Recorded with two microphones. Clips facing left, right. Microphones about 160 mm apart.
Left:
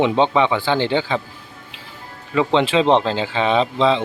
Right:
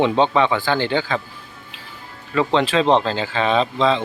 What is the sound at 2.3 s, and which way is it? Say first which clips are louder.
A man's voice: left 1 dB; 20° left (ahead or behind).